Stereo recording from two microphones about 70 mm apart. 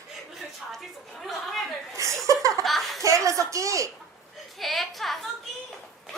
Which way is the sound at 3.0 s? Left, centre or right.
Right.